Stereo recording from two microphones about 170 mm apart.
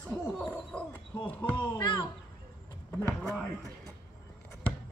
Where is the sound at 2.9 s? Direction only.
5° left (ahead or behind).